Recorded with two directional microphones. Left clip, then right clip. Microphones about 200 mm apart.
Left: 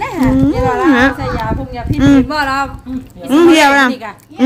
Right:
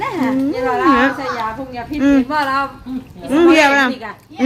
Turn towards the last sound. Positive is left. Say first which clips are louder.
# left 3 dB
turn(degrees=15)  # may be behind; listen again after turning